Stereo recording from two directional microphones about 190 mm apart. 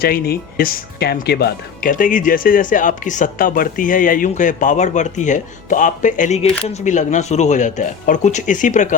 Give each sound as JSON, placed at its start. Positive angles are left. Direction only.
{"t": 0.0, "sound": "speech", "side_deg": 55}